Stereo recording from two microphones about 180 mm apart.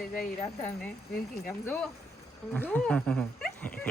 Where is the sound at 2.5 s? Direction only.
10° left (ahead or behind).